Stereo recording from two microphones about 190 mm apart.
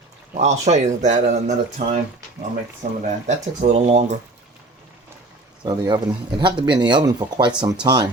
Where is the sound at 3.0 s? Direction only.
40° right (ahead or behind).